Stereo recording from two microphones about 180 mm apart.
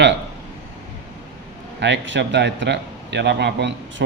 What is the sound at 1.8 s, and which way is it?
A man's voice, 80° right.